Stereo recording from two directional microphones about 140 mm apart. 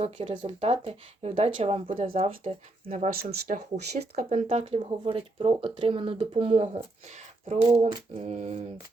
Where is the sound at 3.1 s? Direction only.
80° right.